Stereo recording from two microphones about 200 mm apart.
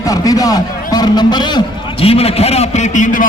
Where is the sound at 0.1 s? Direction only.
20° left (ahead or behind).